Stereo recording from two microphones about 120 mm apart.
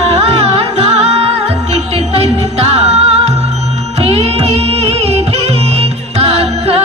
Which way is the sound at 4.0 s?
60° right (ahead or behind).